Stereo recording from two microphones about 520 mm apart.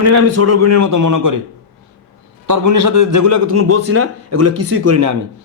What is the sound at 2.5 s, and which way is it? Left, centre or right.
A man's voice, right.